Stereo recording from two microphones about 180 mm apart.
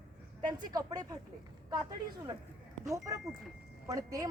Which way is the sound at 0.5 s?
20° right (ahead or behind).